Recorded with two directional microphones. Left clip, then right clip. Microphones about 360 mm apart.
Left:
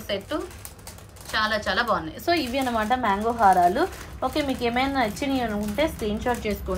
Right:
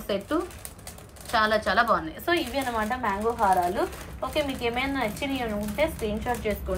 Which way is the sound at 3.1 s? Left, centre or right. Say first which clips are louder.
Left 4 dB; left.